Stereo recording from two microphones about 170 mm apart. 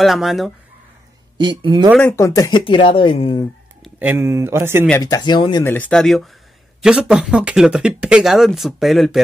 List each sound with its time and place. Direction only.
0.0 s speech: centre (ahead or behind)
1.4 s speech: 30° right (ahead or behind)
2.0 s speech: 15° left (ahead or behind)
2.6 s speech: 30° left (ahead or behind)
4.0 s speech: 15° right (ahead or behind)
5.0 s speech: 25° left (ahead or behind)
5.6 s speech: 10° left (ahead or behind)